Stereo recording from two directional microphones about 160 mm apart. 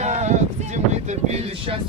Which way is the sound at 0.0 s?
45° right (ahead or behind).